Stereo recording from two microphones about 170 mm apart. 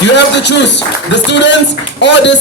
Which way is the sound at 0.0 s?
90° left.